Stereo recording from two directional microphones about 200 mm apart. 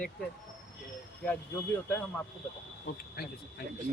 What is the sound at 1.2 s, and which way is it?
Speech, 10° left (ahead or behind).